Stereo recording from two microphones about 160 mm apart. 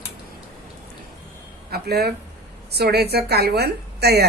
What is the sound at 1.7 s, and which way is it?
A woman's voice, 80° right.